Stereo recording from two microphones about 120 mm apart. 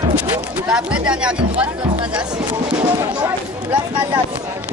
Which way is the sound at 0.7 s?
10° right (ahead or behind).